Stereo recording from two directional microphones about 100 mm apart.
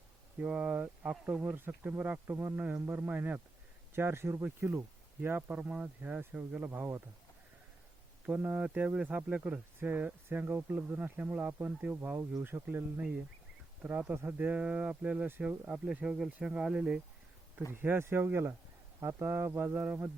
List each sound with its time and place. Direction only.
0.3 s speech: 15° right (ahead or behind)
8.3 s speech: 15° right (ahead or behind)
12.6 s speech: 10° right (ahead or behind)
17.7 s speech: 20° right (ahead or behind)